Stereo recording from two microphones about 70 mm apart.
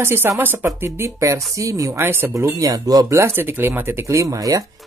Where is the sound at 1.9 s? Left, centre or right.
Right.